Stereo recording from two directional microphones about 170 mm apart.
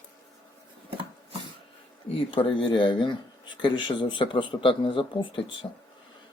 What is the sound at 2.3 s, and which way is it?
A man's voice, 30° left (ahead or behind).